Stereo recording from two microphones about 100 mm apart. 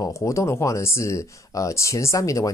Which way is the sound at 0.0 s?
30° left (ahead or behind).